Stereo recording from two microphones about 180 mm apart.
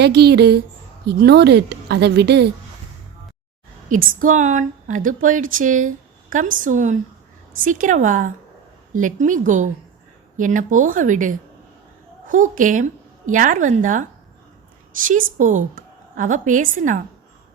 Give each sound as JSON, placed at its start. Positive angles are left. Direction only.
{"t": 0.0, "sound": "a woman's voice", "side_deg": -65}
{"t": 3.9, "sound": "a woman's voice", "side_deg": -45}
{"t": 15.0, "sound": "a woman's voice", "side_deg": -45}